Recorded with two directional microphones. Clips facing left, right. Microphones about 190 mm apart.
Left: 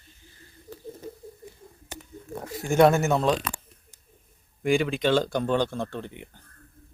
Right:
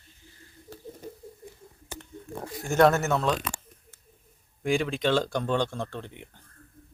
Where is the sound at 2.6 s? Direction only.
15° left (ahead or behind).